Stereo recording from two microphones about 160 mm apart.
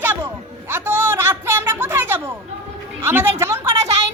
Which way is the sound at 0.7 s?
15° right (ahead or behind).